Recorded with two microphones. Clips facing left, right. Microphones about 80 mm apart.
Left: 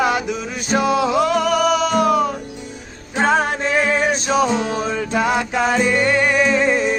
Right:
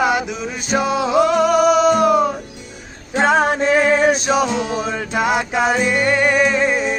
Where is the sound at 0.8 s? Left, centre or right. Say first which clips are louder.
Left 4 dB; right.